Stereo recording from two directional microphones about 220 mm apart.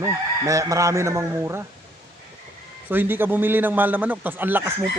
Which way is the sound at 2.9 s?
10° right (ahead or behind).